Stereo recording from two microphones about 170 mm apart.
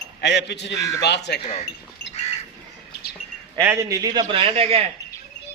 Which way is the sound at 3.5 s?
15° right (ahead or behind).